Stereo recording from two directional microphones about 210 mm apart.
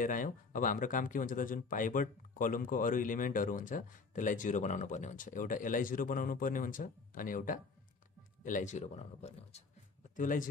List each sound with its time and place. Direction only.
0.0 s speech: 40° left (ahead or behind)